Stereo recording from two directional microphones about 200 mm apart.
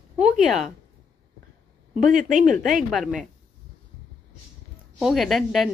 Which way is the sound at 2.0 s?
40° right (ahead or behind).